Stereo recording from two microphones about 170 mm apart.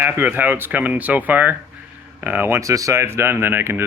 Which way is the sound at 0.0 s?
10° right (ahead or behind).